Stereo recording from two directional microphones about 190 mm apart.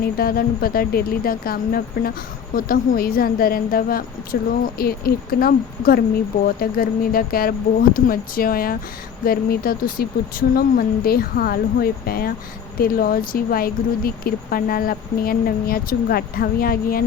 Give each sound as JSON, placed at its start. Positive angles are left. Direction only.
{"t": 0.0, "sound": "speech", "side_deg": 50}